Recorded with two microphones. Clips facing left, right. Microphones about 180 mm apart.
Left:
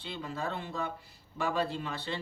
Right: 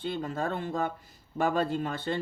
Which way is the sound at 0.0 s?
50° right (ahead or behind).